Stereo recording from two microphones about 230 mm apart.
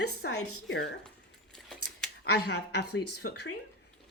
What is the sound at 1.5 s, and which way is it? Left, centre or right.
Keys jangling, centre.